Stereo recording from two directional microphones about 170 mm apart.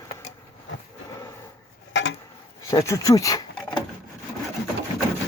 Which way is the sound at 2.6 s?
20° left (ahead or behind).